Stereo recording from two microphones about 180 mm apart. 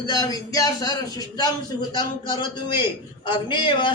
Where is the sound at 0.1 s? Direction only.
20° left (ahead or behind).